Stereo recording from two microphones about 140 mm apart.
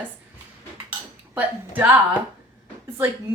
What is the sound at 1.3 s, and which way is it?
A woman's voice, 10° right (ahead or behind).